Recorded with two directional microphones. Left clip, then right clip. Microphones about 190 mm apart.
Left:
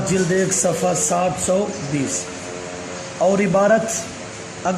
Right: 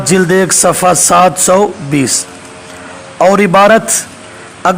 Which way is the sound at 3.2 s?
40° right (ahead or behind).